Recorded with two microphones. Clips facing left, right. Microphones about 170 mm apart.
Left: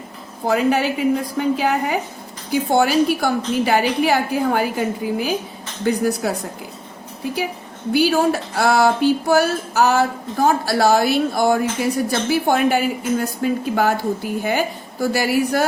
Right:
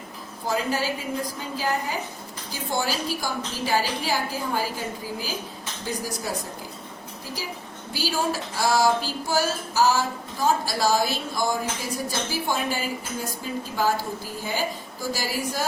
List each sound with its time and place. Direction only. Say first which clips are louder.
0.4 s speech: left 8 dB; 65° left (ahead or behind)
7.9 s speech: left 10 dB; 60° left (ahead or behind)
15.0 s speech: left 10 dB; 60° left (ahead or behind)